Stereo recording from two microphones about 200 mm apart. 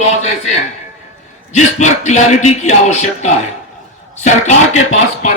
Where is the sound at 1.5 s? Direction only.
35° left (ahead or behind).